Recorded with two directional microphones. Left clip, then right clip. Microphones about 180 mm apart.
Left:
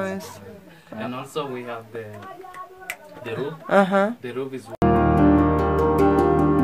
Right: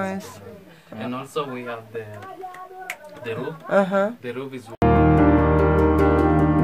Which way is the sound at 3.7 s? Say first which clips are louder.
Left 1 dB; 15° left (ahead or behind).